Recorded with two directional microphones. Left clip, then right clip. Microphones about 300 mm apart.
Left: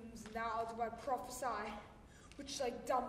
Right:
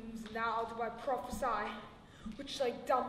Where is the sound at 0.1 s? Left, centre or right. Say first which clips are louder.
Right 5 dB; left.